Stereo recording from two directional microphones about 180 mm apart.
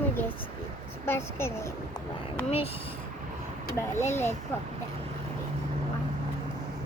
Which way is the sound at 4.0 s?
15° left (ahead or behind).